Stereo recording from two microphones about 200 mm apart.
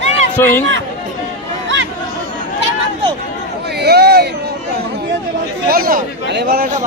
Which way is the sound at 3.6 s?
55° right (ahead or behind).